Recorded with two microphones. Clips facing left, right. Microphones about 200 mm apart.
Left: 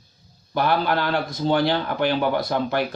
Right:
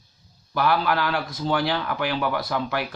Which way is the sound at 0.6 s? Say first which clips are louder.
Left 1 dB; 30° left (ahead or behind).